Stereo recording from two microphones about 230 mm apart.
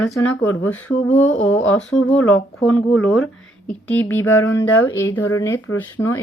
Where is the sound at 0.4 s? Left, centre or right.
Centre.